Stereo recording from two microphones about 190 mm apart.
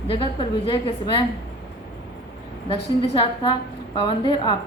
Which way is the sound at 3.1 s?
25° left (ahead or behind).